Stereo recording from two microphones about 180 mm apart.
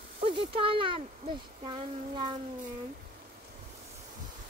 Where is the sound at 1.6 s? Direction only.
25° right (ahead or behind).